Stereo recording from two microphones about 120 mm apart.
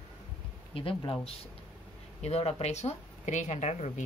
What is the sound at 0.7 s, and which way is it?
Speech, 45° left (ahead or behind).